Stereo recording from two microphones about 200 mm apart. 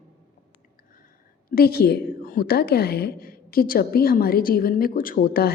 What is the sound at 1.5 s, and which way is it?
A woman's voice, 50° left (ahead or behind).